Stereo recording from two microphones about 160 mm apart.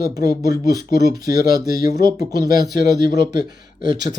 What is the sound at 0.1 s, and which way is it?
Speech, 20° right (ahead or behind).